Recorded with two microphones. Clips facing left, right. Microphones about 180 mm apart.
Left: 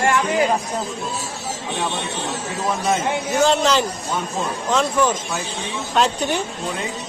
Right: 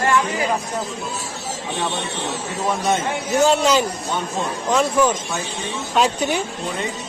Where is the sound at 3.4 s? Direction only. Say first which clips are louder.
Right 1 dB; 10° right (ahead or behind).